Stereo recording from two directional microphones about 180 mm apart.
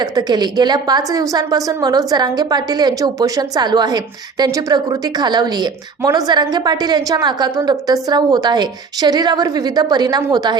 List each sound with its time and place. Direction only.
0.0 s a woman's voice: 25° right (ahead or behind)